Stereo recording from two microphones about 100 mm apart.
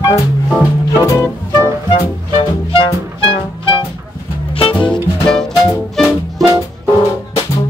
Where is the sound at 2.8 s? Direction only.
60° left (ahead or behind).